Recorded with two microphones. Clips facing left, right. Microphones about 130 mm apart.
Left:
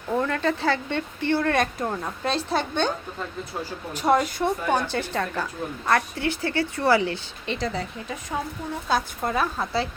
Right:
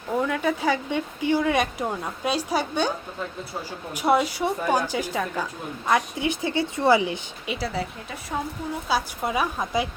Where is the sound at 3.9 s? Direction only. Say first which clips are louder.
Even; 10° right (ahead or behind).